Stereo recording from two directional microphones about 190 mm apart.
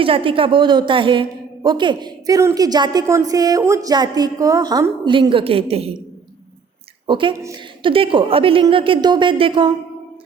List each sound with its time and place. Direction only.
0.0 s a woman's voice: 30° right (ahead or behind)
7.1 s a woman's voice: 25° right (ahead or behind)